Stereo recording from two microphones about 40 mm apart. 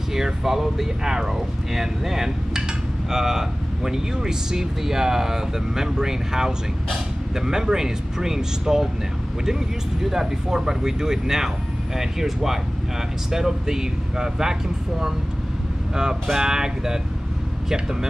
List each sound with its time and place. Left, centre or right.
0.1 s speech: centre
10.0 s speech: centre